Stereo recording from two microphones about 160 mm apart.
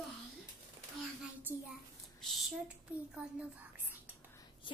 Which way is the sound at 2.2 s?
Centre (ahead or behind).